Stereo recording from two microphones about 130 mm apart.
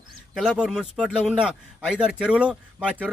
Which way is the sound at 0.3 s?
5° right (ahead or behind).